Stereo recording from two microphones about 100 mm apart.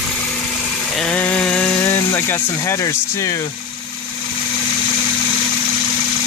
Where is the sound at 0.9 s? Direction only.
5° left (ahead or behind); by 3.4 s 30° left (ahead or behind).